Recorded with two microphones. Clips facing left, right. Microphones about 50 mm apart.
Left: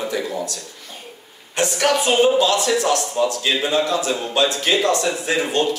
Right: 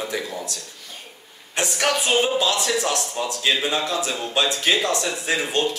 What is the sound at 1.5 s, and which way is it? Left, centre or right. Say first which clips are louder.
A man's voice: left 4 dB; centre.